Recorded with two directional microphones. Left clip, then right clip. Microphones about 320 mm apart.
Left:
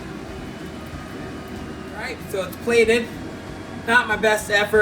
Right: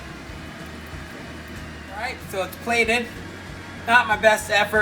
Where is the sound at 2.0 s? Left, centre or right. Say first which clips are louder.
Even; centre.